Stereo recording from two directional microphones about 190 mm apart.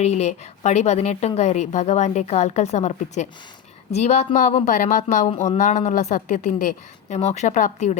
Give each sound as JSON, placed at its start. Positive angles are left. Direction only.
{"t": 0.0, "sound": "speech", "side_deg": 35}